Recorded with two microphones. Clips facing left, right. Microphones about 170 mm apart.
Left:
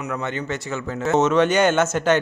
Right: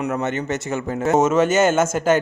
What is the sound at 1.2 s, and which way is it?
Speech, 5° right (ahead or behind).